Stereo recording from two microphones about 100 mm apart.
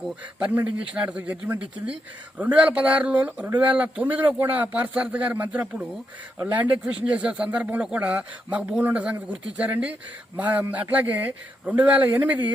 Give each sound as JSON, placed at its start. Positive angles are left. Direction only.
{"t": 0.3, "sound": "speech", "side_deg": -10}